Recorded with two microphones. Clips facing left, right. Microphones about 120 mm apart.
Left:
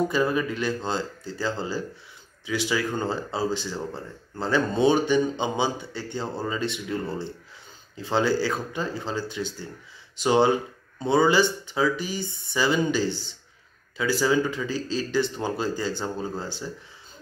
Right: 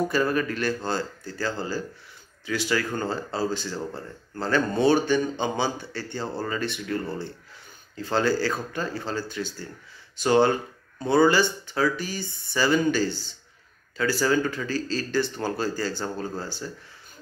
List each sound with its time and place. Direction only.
0.2 s speech: 15° left (ahead or behind)